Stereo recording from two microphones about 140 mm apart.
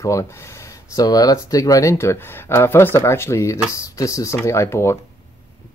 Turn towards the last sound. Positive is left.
turn(degrees=20)  # may be behind; listen again after turning